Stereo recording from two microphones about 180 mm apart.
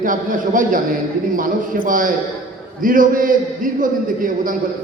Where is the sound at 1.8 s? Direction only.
50° right (ahead or behind).